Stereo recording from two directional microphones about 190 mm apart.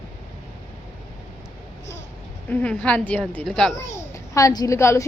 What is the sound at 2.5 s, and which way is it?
A woman's voice, 5° left (ahead or behind).